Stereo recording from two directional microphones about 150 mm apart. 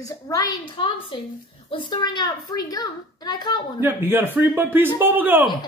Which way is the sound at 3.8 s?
15° right (ahead or behind).